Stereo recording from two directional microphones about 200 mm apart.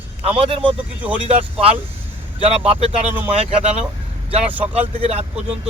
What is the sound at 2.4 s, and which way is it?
Speech, 30° right (ahead or behind).